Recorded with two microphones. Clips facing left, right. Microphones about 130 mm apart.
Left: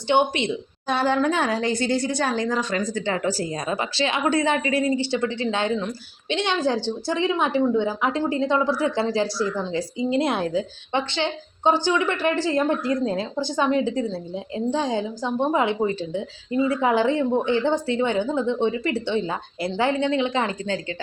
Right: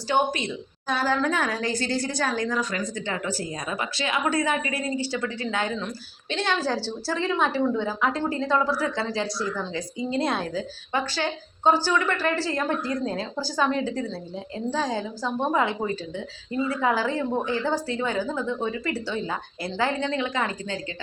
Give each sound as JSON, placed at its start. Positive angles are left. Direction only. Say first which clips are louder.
{"t": 0.1, "sound": "speech", "louder": "left 4 dB", "side_deg": 25}